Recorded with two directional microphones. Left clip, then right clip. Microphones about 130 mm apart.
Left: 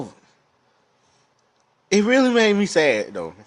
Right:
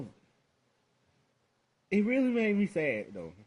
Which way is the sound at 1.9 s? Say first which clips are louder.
Left 13 dB; 35° left (ahead or behind).